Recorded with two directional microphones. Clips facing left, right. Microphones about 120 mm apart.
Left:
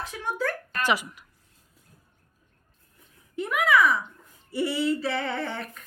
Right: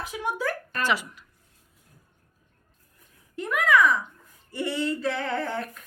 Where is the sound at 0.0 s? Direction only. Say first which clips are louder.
Right 1 dB; 10° right (ahead or behind).